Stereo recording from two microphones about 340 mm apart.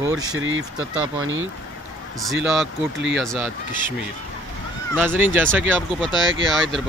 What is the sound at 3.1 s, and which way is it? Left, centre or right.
Speech, centre.